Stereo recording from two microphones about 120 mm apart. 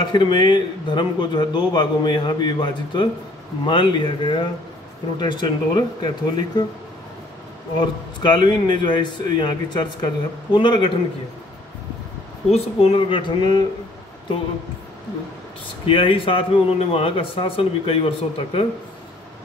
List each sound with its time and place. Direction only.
0.0 s a man's voice: 40° left (ahead or behind)
7.8 s a man's voice: 40° left (ahead or behind)
12.4 s a man's voice: 55° left (ahead or behind); by 13.7 s 40° left (ahead or behind)
15.9 s a man's voice: 45° left (ahead or behind)